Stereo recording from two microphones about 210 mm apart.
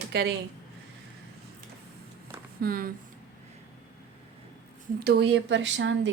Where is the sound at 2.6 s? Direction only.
45° right (ahead or behind).